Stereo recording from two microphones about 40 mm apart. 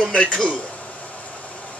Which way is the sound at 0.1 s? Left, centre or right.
Left.